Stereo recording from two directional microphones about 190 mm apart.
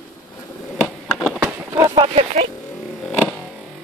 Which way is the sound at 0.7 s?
Centre (ahead or behind).